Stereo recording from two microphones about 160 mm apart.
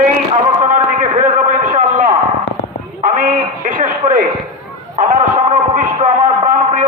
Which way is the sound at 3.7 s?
60° right (ahead or behind).